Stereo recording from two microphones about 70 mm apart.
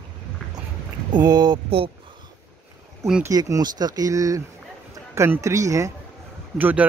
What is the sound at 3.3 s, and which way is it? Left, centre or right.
Speech, right.